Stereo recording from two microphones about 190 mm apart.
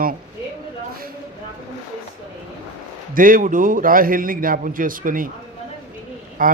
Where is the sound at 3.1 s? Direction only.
45° right (ahead or behind).